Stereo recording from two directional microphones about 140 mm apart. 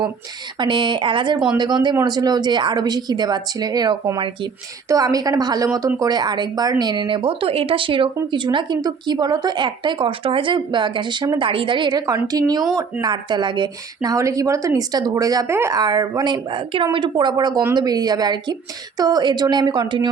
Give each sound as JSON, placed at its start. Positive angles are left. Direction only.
{"t": 0.6, "sound": "a woman's voice", "side_deg": -35}
{"t": 15.8, "sound": "a woman's voice", "side_deg": -30}